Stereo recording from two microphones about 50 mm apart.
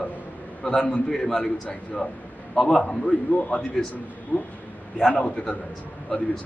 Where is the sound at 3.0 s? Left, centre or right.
Left.